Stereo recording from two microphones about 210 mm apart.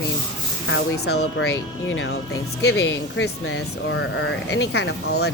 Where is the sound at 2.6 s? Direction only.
55° left (ahead or behind).